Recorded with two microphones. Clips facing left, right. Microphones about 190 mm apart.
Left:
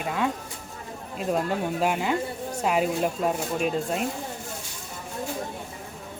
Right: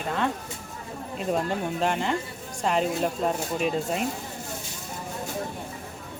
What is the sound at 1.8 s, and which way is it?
Speech, 5° left (ahead or behind).